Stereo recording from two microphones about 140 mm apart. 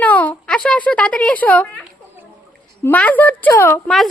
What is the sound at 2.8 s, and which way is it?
Speech, 10° left (ahead or behind).